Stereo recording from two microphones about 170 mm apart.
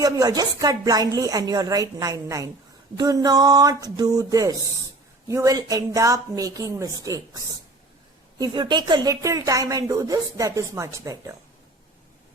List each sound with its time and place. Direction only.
0.0 s speech: 20° right (ahead or behind)